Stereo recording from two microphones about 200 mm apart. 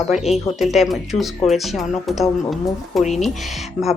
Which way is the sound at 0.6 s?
Centre (ahead or behind).